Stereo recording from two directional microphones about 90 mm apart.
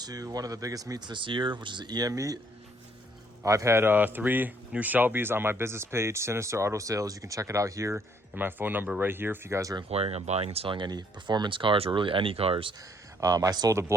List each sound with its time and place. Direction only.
0.0 s speech: 40° right (ahead or behind)
3.4 s speech: 35° right (ahead or behind)
8.4 s speech: 20° right (ahead or behind)
10.5 s speech: 80° right
13.2 s speech: 45° right (ahead or behind)